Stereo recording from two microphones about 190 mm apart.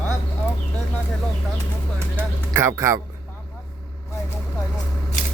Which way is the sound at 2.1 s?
15° right (ahead or behind).